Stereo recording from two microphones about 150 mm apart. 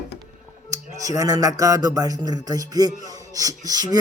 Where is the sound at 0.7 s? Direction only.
20° right (ahead or behind).